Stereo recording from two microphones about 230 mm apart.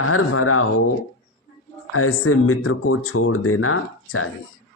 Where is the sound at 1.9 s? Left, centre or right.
Left.